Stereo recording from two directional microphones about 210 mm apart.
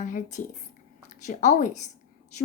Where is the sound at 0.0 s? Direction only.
35° left (ahead or behind).